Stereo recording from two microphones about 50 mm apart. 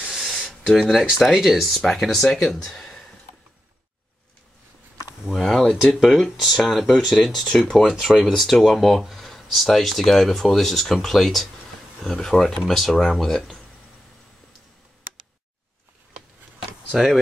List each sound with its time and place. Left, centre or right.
0.1 s a sound: centre
1.2 s speech: centre
1.8 s speech: centre
5.3 s a sound: centre
5.9 s speech: centre
7.9 s speech: centre
16.9 s speech: centre